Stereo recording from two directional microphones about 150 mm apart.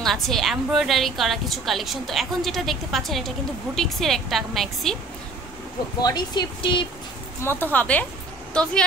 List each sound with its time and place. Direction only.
0.0 s a woman's voice: centre (ahead or behind)
6.0 s speech: 30° left (ahead or behind)
7.4 s a woman's voice: 15° left (ahead or behind)